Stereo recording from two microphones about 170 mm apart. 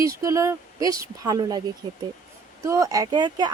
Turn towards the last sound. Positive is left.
turn(degrees=-25)  # may be behind; listen again after turning